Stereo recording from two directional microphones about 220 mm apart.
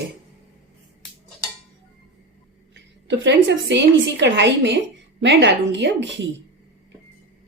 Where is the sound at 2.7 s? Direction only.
55° right (ahead or behind).